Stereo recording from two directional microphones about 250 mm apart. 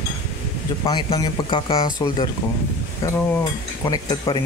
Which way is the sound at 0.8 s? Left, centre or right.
Centre.